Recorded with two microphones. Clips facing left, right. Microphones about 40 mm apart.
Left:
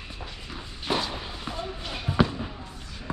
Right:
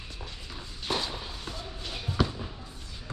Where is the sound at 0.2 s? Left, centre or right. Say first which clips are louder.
Left 3 dB; left.